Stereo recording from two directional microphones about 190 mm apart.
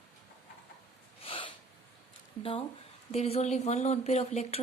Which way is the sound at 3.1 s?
35° left (ahead or behind).